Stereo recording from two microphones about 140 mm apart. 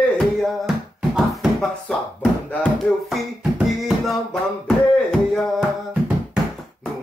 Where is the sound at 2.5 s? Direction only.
5° left (ahead or behind).